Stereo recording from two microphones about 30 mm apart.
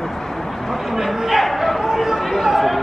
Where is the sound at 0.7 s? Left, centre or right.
Centre.